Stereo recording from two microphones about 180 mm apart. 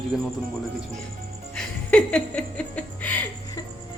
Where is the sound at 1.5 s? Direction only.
5° left (ahead or behind).